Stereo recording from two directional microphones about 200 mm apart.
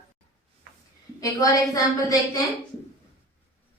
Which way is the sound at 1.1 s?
15° left (ahead or behind).